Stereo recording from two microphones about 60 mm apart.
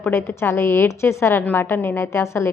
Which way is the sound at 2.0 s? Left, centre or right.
Left.